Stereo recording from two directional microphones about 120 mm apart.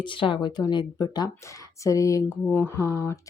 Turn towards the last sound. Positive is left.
turn(degrees=15)  # may be behind; listen again after turning